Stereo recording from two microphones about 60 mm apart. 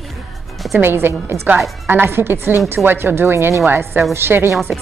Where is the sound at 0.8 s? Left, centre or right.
Right.